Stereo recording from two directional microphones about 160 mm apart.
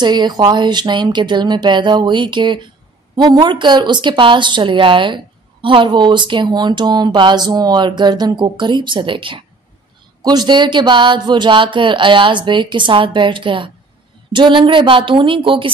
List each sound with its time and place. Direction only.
0.0 s speech: 25° right (ahead or behind)